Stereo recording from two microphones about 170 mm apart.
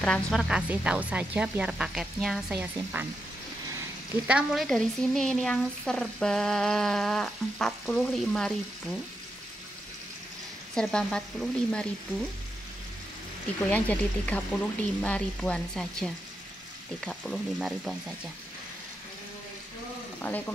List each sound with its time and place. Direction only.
0.0 s speech: centre (ahead or behind)
4.3 s speech: 5° right (ahead or behind)
10.7 s speech: 5° left (ahead or behind)
13.7 s speech: 10° left (ahead or behind)
17.0 s frying: 5° left (ahead or behind)
17.6 s speech: centre (ahead or behind)
20.2 s speech: 10° left (ahead or behind)